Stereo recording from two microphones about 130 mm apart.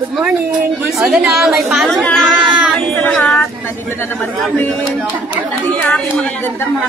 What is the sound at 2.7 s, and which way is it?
Child singing, 5° left (ahead or behind).